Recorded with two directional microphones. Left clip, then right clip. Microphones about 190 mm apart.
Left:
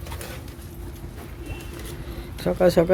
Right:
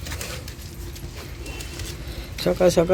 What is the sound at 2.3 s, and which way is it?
Speech, centre (ahead or behind).